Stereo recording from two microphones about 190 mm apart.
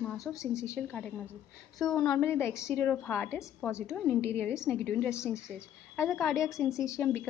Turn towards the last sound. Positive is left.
turn(degrees=15)  # may be behind; listen again after turning